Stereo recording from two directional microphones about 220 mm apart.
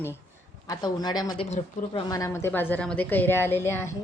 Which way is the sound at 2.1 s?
15° left (ahead or behind).